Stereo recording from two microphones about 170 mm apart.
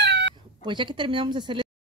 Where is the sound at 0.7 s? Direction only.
30° right (ahead or behind).